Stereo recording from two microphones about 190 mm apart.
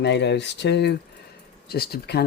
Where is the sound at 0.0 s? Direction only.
65° left (ahead or behind).